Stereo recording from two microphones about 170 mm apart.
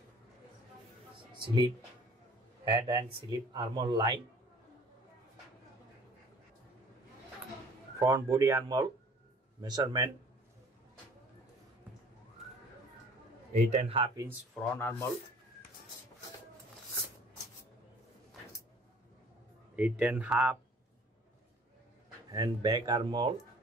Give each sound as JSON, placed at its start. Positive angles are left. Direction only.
{"t": 2.6, "sound": "speech", "side_deg": -25}
{"t": 8.0, "sound": "speech", "side_deg": -20}
{"t": 13.5, "sound": "a man's voice", "side_deg": -45}
{"t": 14.5, "sound": "speech", "side_deg": 5}
{"t": 19.7, "sound": "speech", "side_deg": -10}
{"t": 22.3, "sound": "speech", "side_deg": -25}